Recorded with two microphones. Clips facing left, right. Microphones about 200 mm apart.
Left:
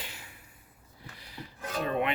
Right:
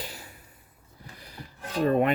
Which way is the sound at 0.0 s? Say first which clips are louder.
Right 6 dB; 40° right (ahead or behind).